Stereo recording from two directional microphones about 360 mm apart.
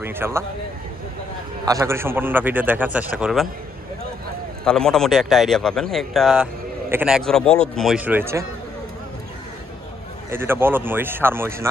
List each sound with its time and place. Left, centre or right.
0.0 s speech: centre
1.6 s speech: centre
4.6 s speech: centre
10.3 s speech: centre